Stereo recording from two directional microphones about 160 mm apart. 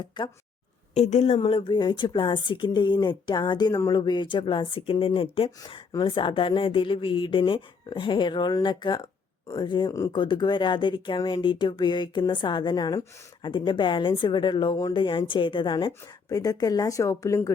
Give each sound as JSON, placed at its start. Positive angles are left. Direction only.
{"t": 0.0, "sound": "speech", "side_deg": 30}
{"t": 0.9, "sound": "a woman's voice", "side_deg": 45}
{"t": 1.4, "sound": "speech", "side_deg": 35}